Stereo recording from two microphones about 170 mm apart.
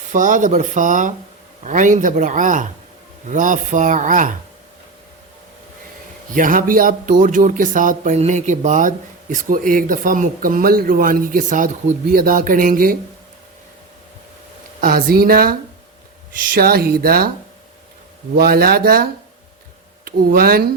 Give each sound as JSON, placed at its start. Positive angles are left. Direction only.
{"t": 0.1, "sound": "speech", "side_deg": -50}
{"t": 6.3, "sound": "speech", "side_deg": -55}
{"t": 14.8, "sound": "speech", "side_deg": -60}
{"t": 18.3, "sound": "speech", "side_deg": -65}
{"t": 20.1, "sound": "speech", "side_deg": -60}